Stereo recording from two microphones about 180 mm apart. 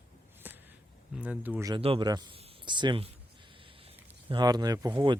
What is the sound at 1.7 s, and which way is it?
Speech, 30° right (ahead or behind).